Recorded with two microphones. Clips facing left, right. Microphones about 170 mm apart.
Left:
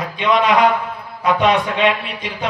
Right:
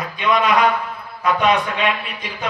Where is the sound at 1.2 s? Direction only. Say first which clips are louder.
Left 2 dB; 20° left (ahead or behind).